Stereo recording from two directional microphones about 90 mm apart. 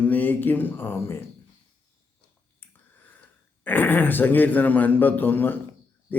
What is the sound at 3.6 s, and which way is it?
A man's voice, 20° left (ahead or behind).